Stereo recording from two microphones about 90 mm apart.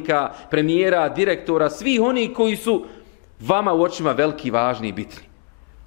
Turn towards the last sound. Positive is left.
turn(degrees=15)  # may be behind; listen again after turning